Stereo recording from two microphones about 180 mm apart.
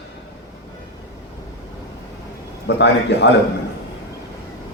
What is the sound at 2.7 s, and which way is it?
Speech, 70° left (ahead or behind).